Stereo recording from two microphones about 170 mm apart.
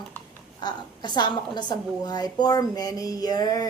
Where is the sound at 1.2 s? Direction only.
25° left (ahead or behind).